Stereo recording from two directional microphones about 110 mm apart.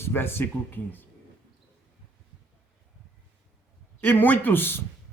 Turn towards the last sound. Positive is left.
turn(degrees=20)  # may be behind; listen again after turning